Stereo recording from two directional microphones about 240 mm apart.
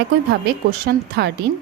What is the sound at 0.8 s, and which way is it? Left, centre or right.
Speech, right.